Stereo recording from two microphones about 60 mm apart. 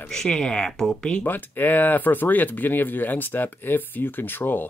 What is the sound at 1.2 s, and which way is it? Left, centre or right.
Speech, left.